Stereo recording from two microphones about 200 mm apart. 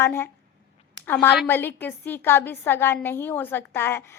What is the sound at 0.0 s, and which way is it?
A woman's voice, 10° left (ahead or behind).